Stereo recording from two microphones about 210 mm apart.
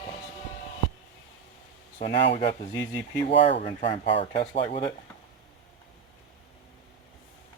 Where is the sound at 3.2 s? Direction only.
25° left (ahead or behind).